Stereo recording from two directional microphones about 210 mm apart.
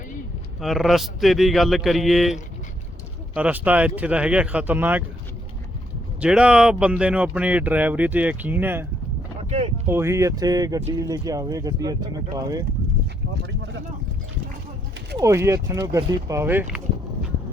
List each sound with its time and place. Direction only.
0.6 s a man's voice: centre (ahead or behind)
6.1 s speech: 5° right (ahead or behind)
9.4 s boat: 30° right (ahead or behind)
9.8 s speech: 10° right (ahead or behind)
15.2 s speech: 15° right (ahead or behind)